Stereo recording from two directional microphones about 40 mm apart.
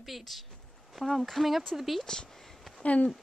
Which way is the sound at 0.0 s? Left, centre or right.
Centre.